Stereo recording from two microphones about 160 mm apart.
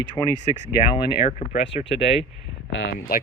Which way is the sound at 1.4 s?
35° left (ahead or behind).